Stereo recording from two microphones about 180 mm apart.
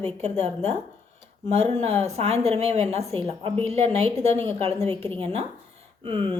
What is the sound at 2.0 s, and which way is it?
A woman's voice, 35° right (ahead or behind).